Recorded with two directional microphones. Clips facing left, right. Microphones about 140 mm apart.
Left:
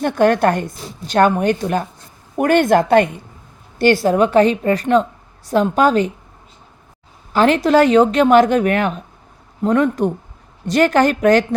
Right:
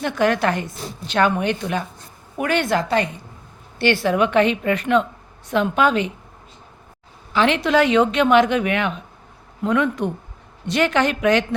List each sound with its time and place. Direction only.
0.0 s a woman's voice: 50° left (ahead or behind)
3.8 s a woman's voice: 40° left (ahead or behind)
7.3 s a woman's voice: 45° left (ahead or behind)